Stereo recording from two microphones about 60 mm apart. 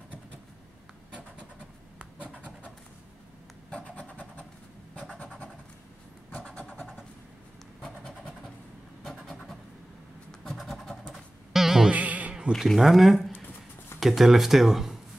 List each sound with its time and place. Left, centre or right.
3.7 s vehicle: centre
9.1 s vehicle: centre
10.4 s scratch: centre
11.9 s a sound: right
12.5 s speech: centre